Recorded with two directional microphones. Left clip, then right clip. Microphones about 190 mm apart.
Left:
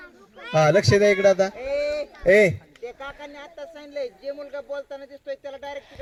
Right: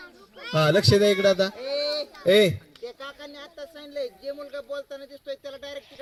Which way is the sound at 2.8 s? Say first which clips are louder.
Left 2 dB; 15° right (ahead or behind).